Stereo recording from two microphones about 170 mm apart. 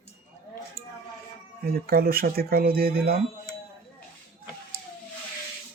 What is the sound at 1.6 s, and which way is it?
Speech, 65° right (ahead or behind).